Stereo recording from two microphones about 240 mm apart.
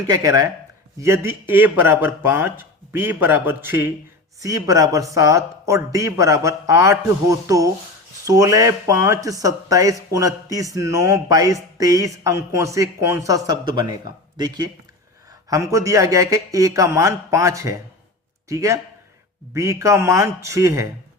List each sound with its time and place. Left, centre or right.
0.1 s speech: centre